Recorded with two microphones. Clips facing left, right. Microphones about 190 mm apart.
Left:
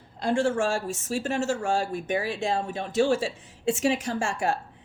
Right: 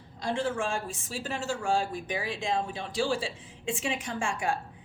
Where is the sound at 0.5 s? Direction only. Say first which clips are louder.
Left 5 dB; 45° left (ahead or behind).